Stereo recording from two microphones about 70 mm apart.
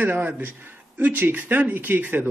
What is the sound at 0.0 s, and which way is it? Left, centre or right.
Speech, right.